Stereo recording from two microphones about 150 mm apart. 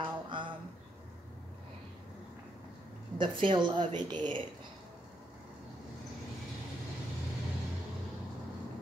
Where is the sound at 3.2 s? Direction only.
35° right (ahead or behind).